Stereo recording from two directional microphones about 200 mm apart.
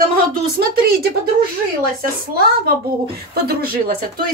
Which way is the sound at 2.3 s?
50° right (ahead or behind).